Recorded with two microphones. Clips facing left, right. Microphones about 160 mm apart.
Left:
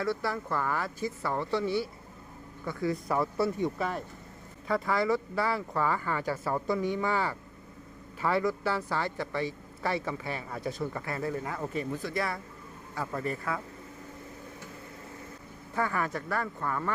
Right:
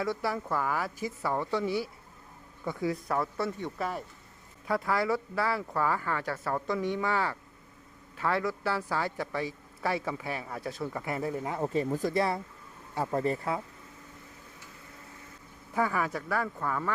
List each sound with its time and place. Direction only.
0.0 s a woman's voice: 10° right (ahead or behind)
3.1 s speech: 5° left (ahead or behind)
11.0 s a woman's voice: 15° right (ahead or behind)
11.5 s speech: 30° right (ahead or behind)
12.1 s speech: 30° right (ahead or behind)
15.7 s a woman's voice: 10° right (ahead or behind)